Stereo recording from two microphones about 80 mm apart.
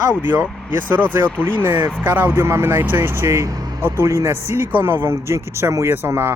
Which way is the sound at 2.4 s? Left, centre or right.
Right.